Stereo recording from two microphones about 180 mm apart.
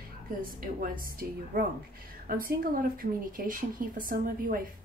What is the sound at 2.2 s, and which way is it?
A woman's voice, 50° right (ahead or behind).